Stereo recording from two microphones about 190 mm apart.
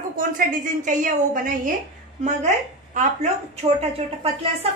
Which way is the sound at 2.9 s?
40° right (ahead or behind).